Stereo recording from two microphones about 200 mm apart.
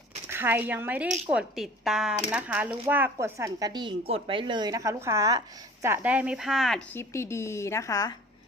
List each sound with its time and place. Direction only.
0.3 s a woman's voice: 10° right (ahead or behind); by 8.1 s 15° left (ahead or behind)